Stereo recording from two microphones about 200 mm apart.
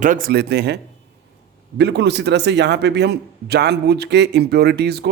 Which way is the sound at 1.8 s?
60° right (ahead or behind).